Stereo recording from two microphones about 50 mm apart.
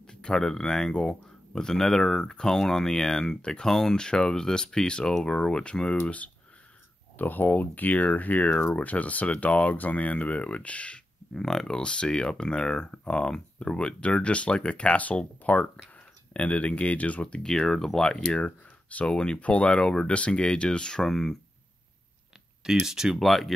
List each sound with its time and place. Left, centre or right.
0.0 s speech: centre
7.2 s speech: left
11.3 s speech: centre
17.5 s speech: centre
18.4 s speech: left; by 21.4 s centre
22.6 s speech: centre
23.1 s speech: centre